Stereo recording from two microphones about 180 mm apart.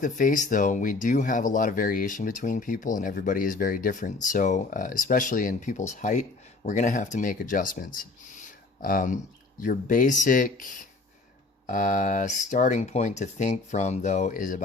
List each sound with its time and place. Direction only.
0.0 s speech: 45° left (ahead or behind)